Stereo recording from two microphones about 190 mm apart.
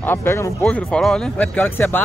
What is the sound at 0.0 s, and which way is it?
Speech, 10° left (ahead or behind).